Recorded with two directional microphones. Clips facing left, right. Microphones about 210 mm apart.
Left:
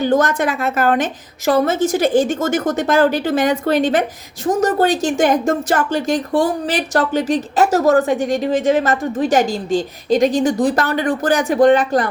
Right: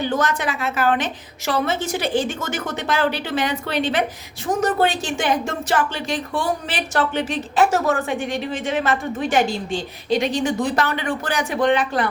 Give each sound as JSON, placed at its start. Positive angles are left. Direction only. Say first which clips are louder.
{"t": 0.0, "sound": "a woman's voice", "louder": "left 6 dB", "side_deg": 45}